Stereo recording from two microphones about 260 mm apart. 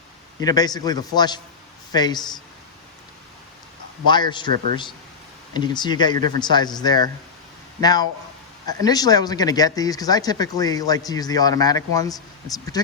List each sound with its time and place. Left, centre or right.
0.3 s speech: centre
4.0 s speech: centre
4.5 s speech: right
5.5 s speech: centre